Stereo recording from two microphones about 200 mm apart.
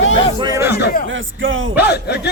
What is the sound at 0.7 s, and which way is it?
A man's voice, 55° left (ahead or behind).